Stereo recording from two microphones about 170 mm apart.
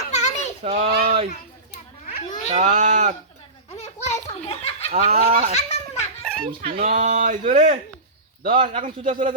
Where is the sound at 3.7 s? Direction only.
40° left (ahead or behind).